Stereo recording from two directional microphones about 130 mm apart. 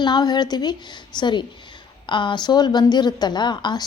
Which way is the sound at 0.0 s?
35° left (ahead or behind).